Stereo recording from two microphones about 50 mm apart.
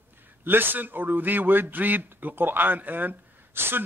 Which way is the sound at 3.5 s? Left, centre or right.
Right.